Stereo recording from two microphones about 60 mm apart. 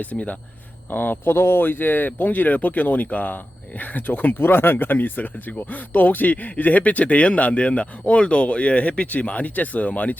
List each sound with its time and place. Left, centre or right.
0.0 s speech: left